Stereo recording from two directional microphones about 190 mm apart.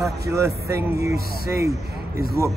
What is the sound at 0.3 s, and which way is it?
Speech, 15° right (ahead or behind).